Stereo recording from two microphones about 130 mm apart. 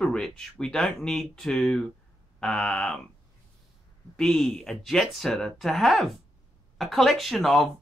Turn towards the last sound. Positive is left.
turn(degrees=0)  # may be behind; listen again after turning